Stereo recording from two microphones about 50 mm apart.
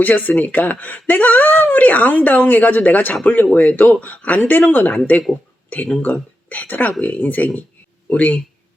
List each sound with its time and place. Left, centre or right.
0.0 s speech: left